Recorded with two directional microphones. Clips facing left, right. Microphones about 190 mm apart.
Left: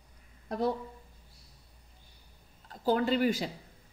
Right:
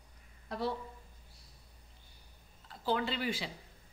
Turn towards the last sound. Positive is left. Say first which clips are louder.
# left 8 dB
turn(degrees=45)  # may be behind; listen again after turning